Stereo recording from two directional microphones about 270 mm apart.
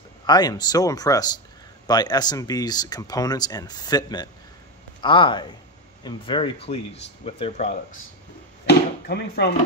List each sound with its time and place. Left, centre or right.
0.3 s speech: centre
8.6 s speech: left